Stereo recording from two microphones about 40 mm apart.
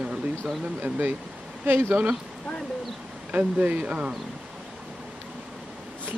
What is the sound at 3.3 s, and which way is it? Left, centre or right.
Speech, right.